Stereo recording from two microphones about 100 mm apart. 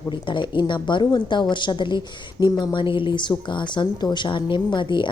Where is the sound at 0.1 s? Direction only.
50° left (ahead or behind).